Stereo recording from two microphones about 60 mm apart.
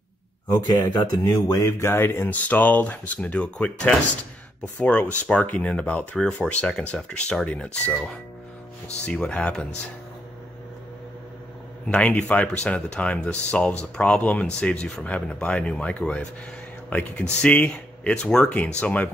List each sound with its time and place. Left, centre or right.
0.5 s speech: left
1.8 s speech: left
2.3 s speech: left
11.9 s speech: centre